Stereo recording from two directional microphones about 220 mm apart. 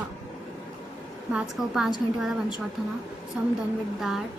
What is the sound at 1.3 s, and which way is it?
Speech, centre (ahead or behind).